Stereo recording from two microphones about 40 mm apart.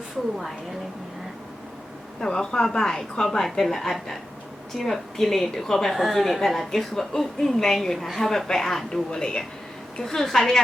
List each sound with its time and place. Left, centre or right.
2.2 s a woman's voice: centre
6.7 s a woman's voice: centre
8.3 s speech: centre
9.0 s speech: left